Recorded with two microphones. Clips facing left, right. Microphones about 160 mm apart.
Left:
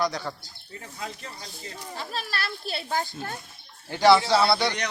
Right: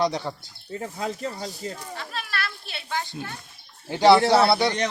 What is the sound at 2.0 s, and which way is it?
Children playing, 30° left (ahead or behind).